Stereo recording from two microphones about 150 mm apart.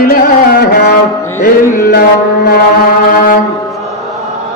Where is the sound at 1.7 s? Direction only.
90° left.